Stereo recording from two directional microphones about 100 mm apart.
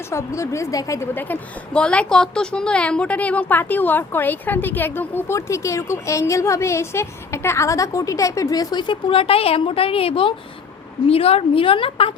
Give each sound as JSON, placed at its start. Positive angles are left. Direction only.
{"t": 0.1, "sound": "a woman's voice", "side_deg": 30}
{"t": 1.1, "sound": "a woman's voice", "side_deg": 20}
{"t": 11.1, "sound": "a woman's voice", "side_deg": 80}